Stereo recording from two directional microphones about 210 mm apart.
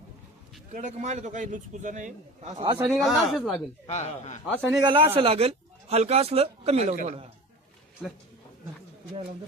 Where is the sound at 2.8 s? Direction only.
Centre (ahead or behind).